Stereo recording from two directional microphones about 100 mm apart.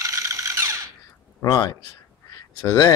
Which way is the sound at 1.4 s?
40° left (ahead or behind).